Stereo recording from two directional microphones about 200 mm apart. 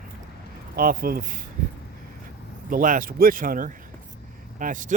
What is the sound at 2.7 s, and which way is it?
Speech, 45° right (ahead or behind).